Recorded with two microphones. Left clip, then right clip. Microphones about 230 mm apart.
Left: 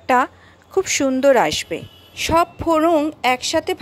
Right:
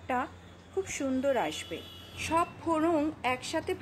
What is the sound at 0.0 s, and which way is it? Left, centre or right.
A woman's voice, left.